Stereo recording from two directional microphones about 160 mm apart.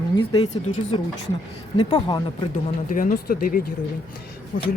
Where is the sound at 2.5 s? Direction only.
60° left (ahead or behind).